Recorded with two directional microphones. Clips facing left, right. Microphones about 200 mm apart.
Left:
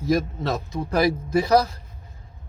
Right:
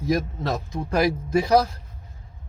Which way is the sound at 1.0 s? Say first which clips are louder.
Left 1 dB; 10° right (ahead or behind).